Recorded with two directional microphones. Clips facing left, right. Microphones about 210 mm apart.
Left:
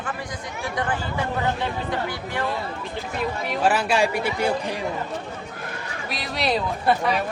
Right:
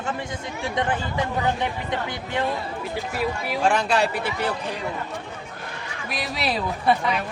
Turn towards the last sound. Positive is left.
turn(degrees=0)  # may be behind; listen again after turning